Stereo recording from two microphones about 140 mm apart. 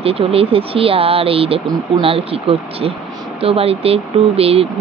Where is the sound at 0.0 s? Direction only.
45° right (ahead or behind).